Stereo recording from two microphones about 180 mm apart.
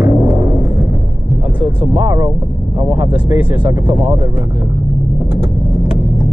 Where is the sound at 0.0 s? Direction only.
15° right (ahead or behind).